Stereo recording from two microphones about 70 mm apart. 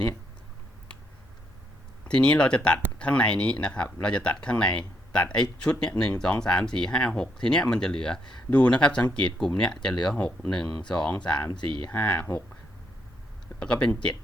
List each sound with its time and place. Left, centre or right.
2.0 s speech: centre
8.4 s speech: left
11.9 s speech: left
13.6 s speech: centre